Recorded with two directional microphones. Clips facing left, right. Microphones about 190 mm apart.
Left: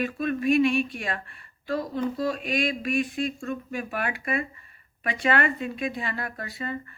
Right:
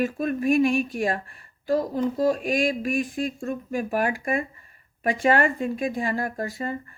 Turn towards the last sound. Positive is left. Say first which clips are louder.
# right 4 dB
turn(degrees=-45)  # may be behind; listen again after turning